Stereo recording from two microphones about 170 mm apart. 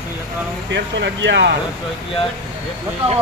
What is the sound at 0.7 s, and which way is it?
Speech, 90° right.